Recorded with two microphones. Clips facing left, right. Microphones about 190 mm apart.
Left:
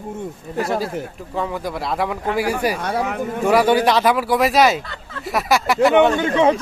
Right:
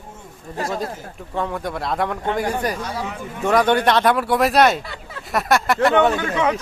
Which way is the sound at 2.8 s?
60° left (ahead or behind).